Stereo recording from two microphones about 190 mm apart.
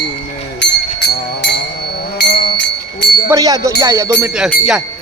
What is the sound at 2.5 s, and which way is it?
Bell, 65° left (ahead or behind).